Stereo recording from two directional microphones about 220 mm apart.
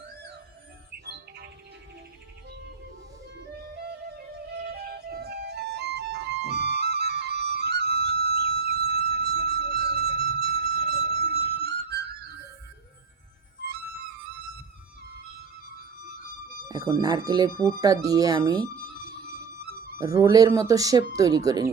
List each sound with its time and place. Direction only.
1.0 s bird: 50° right (ahead or behind)
3.6 s music: 45° right (ahead or behind)
16.6 s speech: 15° right (ahead or behind)
20.0 s speech: 15° right (ahead or behind)